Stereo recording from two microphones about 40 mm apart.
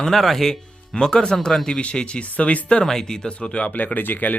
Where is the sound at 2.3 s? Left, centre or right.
Left.